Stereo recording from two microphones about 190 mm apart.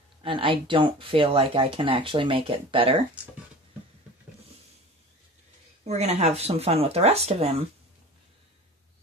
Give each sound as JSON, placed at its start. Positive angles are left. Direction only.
{"t": 0.2, "sound": "speech", "side_deg": -25}
{"t": 5.9, "sound": "speech", "side_deg": -35}